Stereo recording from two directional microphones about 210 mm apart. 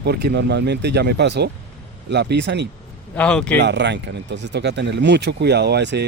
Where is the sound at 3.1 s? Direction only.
5° left (ahead or behind).